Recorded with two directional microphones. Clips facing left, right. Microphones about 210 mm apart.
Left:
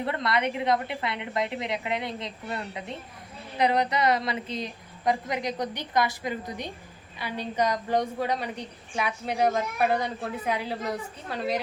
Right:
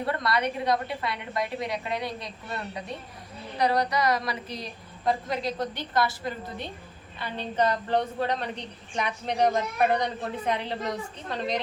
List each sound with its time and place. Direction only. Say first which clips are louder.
0.0 s a woman's voice: even; 25° left (ahead or behind)